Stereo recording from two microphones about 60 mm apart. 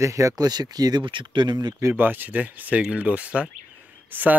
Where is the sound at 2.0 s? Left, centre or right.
Right.